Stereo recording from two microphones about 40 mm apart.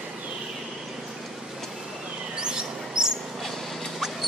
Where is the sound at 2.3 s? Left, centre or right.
Centre.